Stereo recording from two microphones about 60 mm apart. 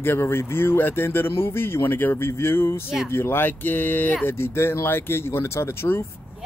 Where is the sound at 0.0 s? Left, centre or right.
Left.